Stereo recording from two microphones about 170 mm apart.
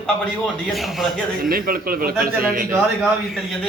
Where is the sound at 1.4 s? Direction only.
60° right (ahead or behind).